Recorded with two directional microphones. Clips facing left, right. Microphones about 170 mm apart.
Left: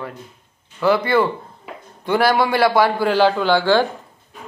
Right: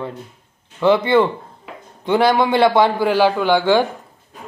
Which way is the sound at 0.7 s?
20° right (ahead or behind).